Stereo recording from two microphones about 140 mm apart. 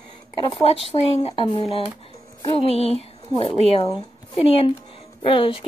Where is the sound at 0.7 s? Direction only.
45° left (ahead or behind).